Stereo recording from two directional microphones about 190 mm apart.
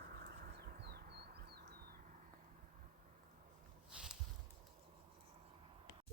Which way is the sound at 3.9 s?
5° right (ahead or behind).